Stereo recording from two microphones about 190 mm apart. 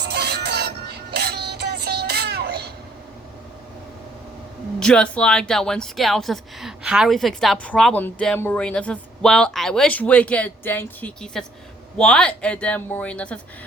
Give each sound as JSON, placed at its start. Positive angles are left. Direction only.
{"t": 0.0, "sound": "music", "side_deg": -60}
{"t": 4.8, "sound": "speech", "side_deg": 5}